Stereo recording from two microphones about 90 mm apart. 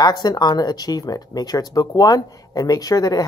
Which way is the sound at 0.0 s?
50° left (ahead or behind).